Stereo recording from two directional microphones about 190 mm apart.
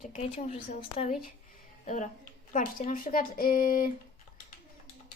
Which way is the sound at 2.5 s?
40° left (ahead or behind).